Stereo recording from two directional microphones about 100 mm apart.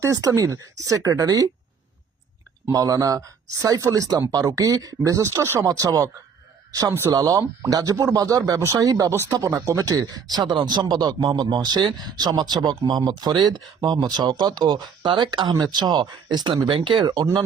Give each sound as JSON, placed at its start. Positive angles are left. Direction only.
{"t": 0.0, "sound": "speech", "side_deg": -35}
{"t": 2.6, "sound": "speech", "side_deg": -35}
{"t": 16.6, "sound": "speech", "side_deg": -60}